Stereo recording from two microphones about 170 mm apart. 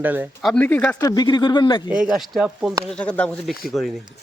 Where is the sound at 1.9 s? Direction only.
5° right (ahead or behind).